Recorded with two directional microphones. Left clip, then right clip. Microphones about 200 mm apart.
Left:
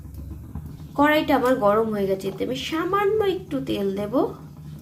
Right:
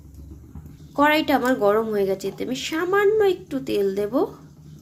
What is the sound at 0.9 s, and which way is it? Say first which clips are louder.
A woman's voice: even; 55° right (ahead or behind).